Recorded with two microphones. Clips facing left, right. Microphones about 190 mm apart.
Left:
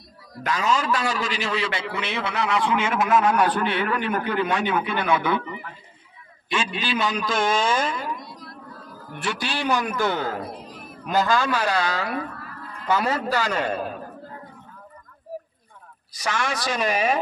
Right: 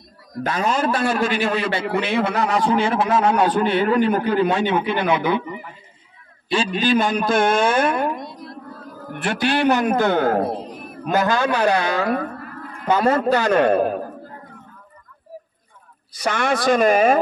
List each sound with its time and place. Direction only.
0.6 s a man's voice: 55° right (ahead or behind); by 5.6 s 20° right (ahead or behind)
6.5 s a man's voice: 40° right (ahead or behind)
13.4 s speech: 60° right (ahead or behind)
16.2 s a man's voice: 55° right (ahead or behind)